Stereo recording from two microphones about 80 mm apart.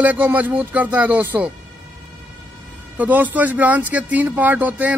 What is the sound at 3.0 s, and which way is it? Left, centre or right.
Speech, right.